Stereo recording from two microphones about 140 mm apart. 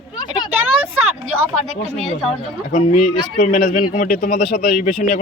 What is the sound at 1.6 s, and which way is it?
Speech, centre (ahead or behind).